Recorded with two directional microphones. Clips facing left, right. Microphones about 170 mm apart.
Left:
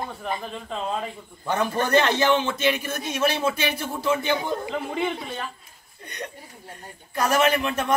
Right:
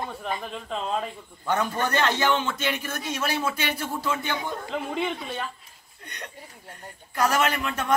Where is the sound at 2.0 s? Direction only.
20° left (ahead or behind).